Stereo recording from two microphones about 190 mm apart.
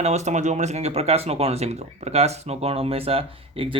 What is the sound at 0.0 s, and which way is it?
Speech, 35° right (ahead or behind).